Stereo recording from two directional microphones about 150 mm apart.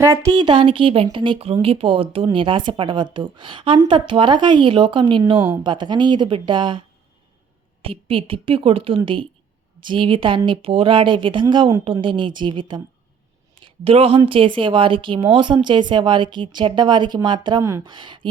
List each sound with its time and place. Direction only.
0.0 s a woman's voice: 20° right (ahead or behind)
0.3 s a woman's voice: 35° right (ahead or behind); by 17.8 s 20° right (ahead or behind)
17.8 s speech: 30° right (ahead or behind)